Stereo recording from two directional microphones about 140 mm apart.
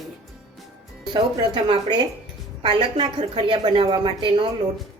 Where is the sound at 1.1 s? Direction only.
35° right (ahead or behind).